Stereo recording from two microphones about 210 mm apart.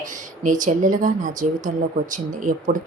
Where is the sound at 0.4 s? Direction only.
40° right (ahead or behind).